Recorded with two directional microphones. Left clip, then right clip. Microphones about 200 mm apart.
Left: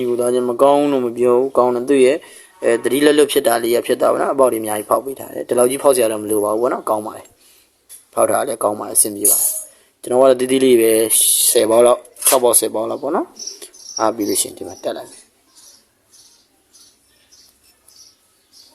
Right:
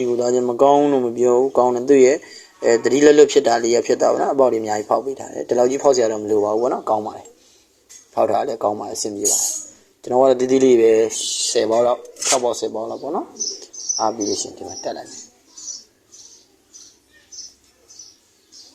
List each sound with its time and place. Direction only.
0.0 s speech: 20° left (ahead or behind)